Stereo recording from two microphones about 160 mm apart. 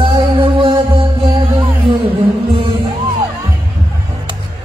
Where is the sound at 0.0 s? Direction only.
35° right (ahead or behind).